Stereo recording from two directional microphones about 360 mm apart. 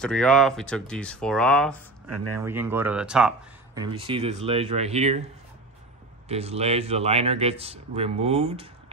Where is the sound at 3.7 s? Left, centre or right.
Centre.